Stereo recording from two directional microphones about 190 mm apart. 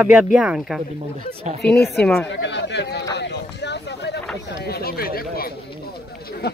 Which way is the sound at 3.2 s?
65° left (ahead or behind).